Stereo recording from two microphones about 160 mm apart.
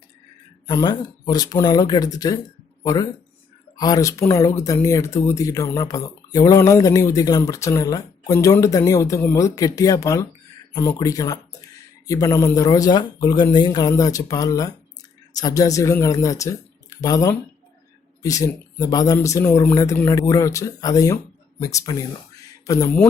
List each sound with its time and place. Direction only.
0.7 s speech: 25° left (ahead or behind)